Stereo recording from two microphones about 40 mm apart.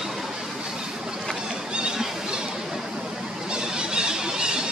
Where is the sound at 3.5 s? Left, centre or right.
Centre.